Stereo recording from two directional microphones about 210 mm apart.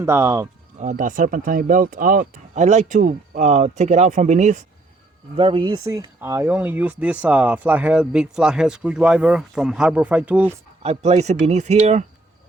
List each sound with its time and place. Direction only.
0.0 s speech: 15° right (ahead or behind)
0.8 s speech: 35° right (ahead or behind)
5.4 s speech: 25° right (ahead or behind); by 10.6 s 10° right (ahead or behind)
10.8 s speech: 30° right (ahead or behind)